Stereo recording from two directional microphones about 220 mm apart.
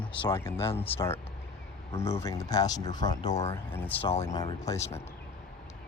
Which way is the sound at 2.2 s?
15° left (ahead or behind).